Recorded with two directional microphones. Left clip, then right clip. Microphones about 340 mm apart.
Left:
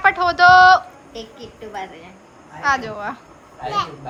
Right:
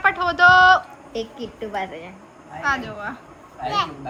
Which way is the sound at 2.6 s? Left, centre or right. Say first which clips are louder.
Left 4 dB; centre.